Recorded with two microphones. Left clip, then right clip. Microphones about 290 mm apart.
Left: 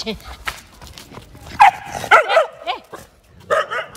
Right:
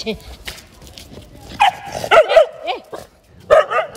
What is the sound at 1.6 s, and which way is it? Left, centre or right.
Dog, centre.